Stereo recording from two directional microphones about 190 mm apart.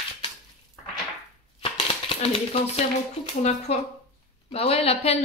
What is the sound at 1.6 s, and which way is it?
Typewriter, 30° left (ahead or behind).